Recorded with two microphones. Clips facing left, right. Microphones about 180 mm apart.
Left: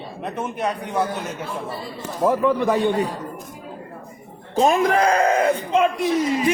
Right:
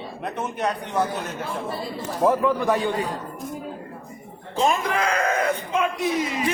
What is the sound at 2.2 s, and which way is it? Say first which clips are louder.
Crowd: even; 5° right (ahead or behind).